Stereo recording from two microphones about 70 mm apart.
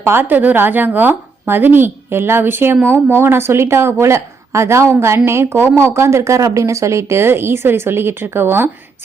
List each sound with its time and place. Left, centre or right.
0.0 s a woman's voice: right